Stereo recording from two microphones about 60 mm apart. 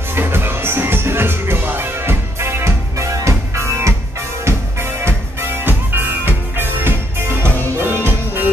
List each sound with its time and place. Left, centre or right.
0.1 s music: right